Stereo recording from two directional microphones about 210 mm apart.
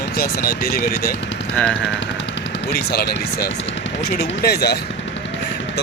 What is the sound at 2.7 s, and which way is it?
Speech, 50° left (ahead or behind).